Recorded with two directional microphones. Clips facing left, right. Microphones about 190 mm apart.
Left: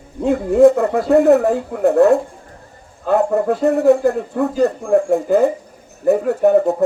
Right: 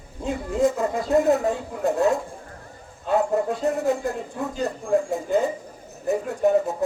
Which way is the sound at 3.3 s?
60° left (ahead or behind).